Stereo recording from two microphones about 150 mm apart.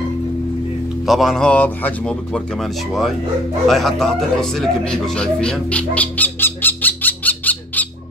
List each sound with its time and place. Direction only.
1.0 s a man's voice: centre (ahead or behind)